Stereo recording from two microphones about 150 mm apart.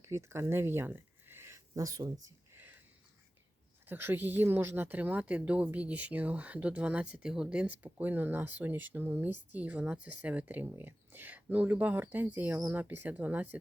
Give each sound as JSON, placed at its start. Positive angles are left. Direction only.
{"t": 0.0, "sound": "speech", "side_deg": -20}
{"t": 2.2, "sound": "a sound", "side_deg": -15}
{"t": 3.8, "sound": "speech", "side_deg": -15}